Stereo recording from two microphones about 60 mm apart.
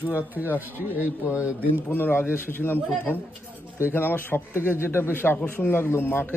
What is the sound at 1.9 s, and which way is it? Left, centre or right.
A man's voice, left.